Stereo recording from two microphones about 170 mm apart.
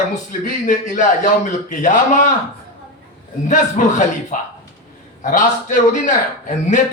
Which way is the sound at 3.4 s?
45° left (ahead or behind).